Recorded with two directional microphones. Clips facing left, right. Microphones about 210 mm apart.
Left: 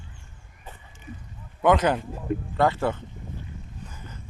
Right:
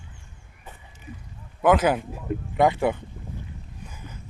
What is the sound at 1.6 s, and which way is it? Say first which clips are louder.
Speech: right 1 dB; 5° right (ahead or behind).